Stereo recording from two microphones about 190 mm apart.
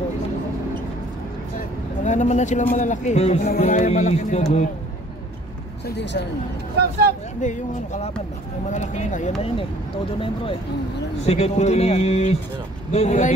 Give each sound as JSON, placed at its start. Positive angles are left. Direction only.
{"t": 2.0, "sound": "a man's voice", "side_deg": 40}
{"t": 6.8, "sound": "vehicle", "side_deg": -55}
{"t": 7.3, "sound": "a man's voice", "side_deg": 40}
{"t": 11.2, "sound": "a man's voice", "side_deg": 35}